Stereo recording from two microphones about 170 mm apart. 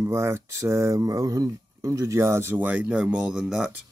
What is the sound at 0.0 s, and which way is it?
Speech, 15° right (ahead or behind).